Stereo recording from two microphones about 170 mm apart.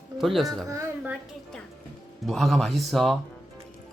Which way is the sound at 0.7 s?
15° right (ahead or behind).